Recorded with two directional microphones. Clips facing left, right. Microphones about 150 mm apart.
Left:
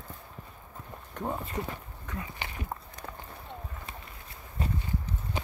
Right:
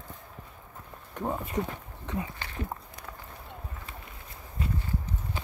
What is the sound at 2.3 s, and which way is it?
Speech, 15° left (ahead or behind).